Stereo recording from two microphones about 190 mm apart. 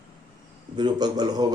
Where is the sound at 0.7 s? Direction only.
20° right (ahead or behind).